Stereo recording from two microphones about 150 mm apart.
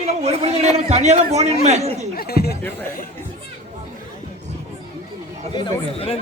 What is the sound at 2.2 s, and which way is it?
Speech, 90° left.